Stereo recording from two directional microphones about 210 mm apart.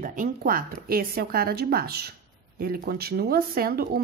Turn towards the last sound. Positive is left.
turn(degrees=-45)  # may be behind; listen again after turning